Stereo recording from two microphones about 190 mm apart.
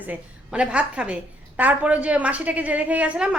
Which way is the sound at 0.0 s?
5° right (ahead or behind).